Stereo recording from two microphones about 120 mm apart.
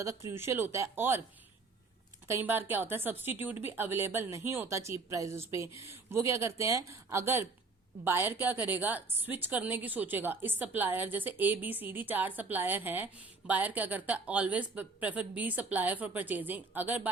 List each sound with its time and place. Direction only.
0.0 s a woman's voice: 25° right (ahead or behind)
2.2 s a woman's voice: 20° right (ahead or behind)